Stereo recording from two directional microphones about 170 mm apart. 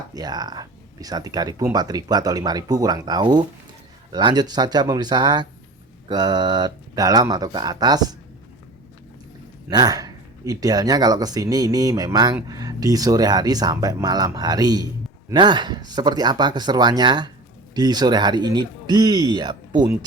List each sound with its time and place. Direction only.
0.1 s speech: 20° right (ahead or behind)
9.6 s speech: 25° right (ahead or behind)